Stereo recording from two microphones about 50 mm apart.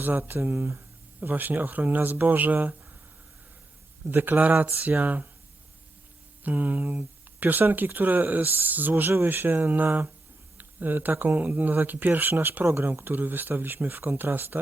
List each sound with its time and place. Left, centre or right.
0.2 s speech: right
4.1 s speech: right
6.4 s speech: right